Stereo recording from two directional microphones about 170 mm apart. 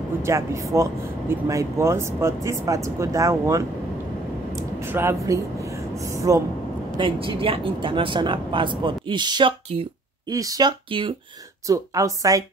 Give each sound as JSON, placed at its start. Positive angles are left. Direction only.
{"t": 0.3, "sound": "speech", "side_deg": -15}
{"t": 4.9, "sound": "speech", "side_deg": -15}
{"t": 7.0, "sound": "speech", "side_deg": -30}
{"t": 11.6, "sound": "speech", "side_deg": -20}